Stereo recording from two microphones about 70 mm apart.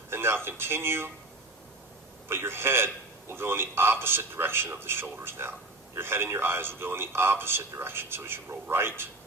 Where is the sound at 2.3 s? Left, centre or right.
Right.